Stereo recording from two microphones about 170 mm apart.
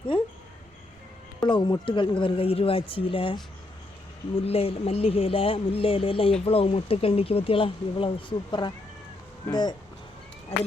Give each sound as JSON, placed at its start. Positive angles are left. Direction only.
{"t": 1.4, "sound": "speech", "side_deg": 25}